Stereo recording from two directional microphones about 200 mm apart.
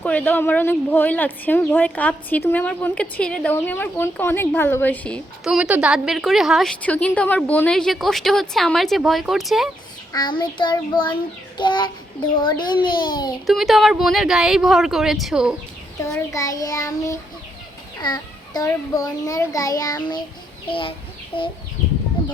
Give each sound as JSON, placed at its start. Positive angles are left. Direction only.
{"t": 0.0, "sound": "speech", "side_deg": 10}
{"t": 10.1, "sound": "a child's voice", "side_deg": 20}
{"t": 13.5, "sound": "speech", "side_deg": 0}
{"t": 16.1, "sound": "a child's voice", "side_deg": 15}